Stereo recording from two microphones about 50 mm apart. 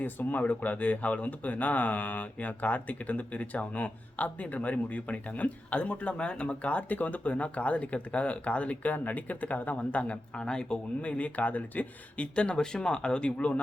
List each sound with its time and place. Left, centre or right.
0.0 s speech: left